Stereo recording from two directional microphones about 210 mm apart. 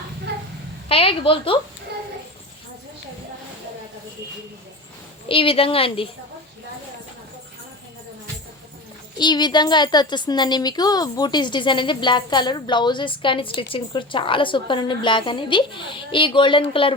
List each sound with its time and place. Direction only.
0.9 s a woman's voice: 25° left (ahead or behind)
5.3 s a woman's voice: 25° left (ahead or behind)
9.1 s a woman's voice: 20° left (ahead or behind)